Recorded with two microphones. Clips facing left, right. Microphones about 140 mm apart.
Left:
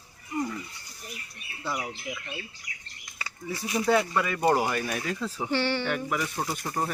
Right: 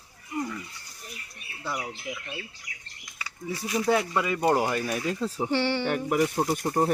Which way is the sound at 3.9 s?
15° right (ahead or behind).